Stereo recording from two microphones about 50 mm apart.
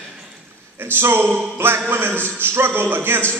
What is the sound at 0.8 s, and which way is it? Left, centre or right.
Speech, right.